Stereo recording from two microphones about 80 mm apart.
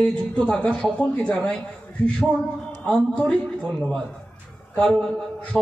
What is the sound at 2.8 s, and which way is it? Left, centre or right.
A man's voice, centre.